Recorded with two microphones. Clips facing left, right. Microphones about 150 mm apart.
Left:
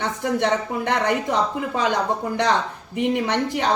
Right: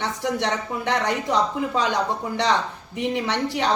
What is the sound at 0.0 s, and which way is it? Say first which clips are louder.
A woman's voice: left 3 dB; 55° left (ahead or behind).